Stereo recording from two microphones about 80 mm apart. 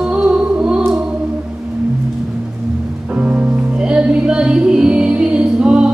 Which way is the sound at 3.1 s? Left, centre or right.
Centre.